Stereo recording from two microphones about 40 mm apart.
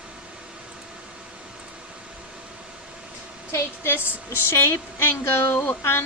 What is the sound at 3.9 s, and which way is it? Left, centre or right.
Speech, right.